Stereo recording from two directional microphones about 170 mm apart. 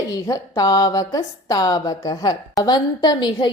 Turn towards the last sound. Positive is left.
turn(degrees=25)  # may be behind; listen again after turning